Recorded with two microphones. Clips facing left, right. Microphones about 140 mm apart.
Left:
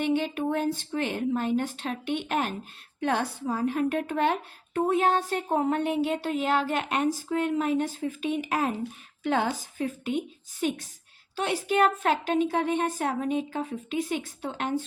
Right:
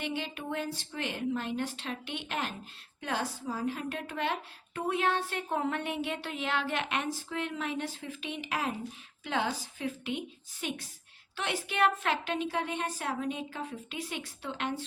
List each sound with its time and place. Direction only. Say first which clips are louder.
0.0 s a woman's voice: left 10 dB; 50° left (ahead or behind)